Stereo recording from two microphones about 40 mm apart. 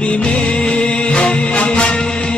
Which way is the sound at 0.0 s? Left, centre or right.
Left.